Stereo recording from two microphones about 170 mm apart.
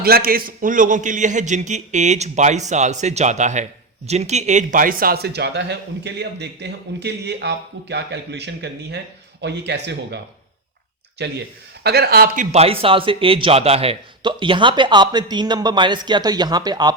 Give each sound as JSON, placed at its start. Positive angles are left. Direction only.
{"t": 0.0, "sound": "a man's voice", "side_deg": -60}
{"t": 11.2, "sound": "speech", "side_deg": -85}
{"t": 11.8, "sound": "speech", "side_deg": -70}
{"t": 12.5, "sound": "a man's voice", "side_deg": -35}